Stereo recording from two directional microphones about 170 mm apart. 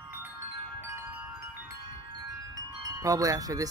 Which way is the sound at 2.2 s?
20° right (ahead or behind).